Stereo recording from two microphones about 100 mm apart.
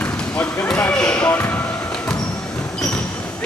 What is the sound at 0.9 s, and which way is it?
Basketball bounce, 10° left (ahead or behind).